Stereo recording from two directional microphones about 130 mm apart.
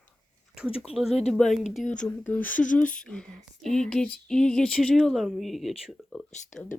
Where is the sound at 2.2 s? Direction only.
15° left (ahead or behind).